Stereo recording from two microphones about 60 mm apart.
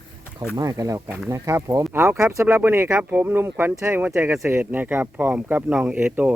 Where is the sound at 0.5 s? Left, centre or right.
Right.